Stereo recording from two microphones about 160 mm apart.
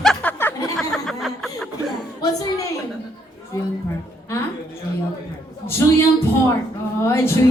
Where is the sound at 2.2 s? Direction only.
25° left (ahead or behind).